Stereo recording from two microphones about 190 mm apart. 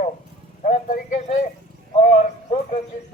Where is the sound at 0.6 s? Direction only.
45° left (ahead or behind).